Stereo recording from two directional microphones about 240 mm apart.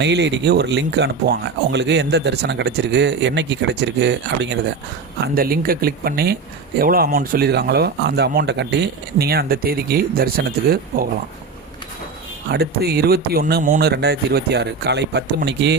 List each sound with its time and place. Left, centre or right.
0.0 s speech: right
12.5 s speech: right